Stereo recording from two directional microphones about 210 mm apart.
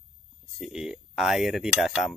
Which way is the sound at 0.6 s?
5° right (ahead or behind).